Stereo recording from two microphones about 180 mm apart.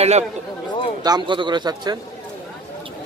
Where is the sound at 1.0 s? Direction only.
25° right (ahead or behind).